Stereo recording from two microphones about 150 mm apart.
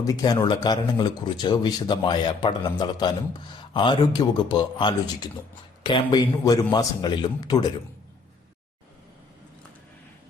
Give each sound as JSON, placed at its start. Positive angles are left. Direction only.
{"t": 0.0, "sound": "speech", "side_deg": 25}